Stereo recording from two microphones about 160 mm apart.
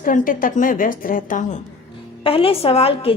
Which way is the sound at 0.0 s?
55° left (ahead or behind).